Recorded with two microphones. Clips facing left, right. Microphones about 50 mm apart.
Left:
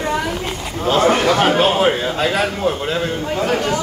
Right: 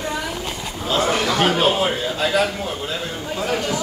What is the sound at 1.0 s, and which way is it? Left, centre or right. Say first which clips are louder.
A man's voice: left 4 dB; left.